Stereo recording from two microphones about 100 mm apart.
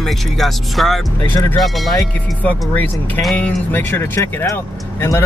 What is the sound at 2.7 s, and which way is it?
Speech, 20° left (ahead or behind).